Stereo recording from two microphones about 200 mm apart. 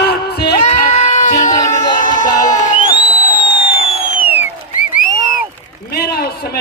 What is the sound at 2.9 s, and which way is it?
Music, 30° right (ahead or behind).